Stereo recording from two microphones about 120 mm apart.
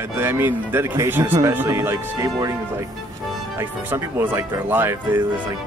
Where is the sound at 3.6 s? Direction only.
20° right (ahead or behind).